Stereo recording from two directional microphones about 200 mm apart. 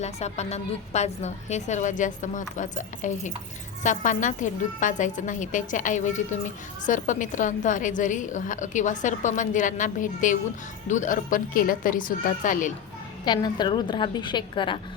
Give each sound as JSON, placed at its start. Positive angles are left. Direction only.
{"t": 0.0, "sound": "a woman's voice", "side_deg": 35}
{"t": 13.2, "sound": "a woman's voice", "side_deg": 20}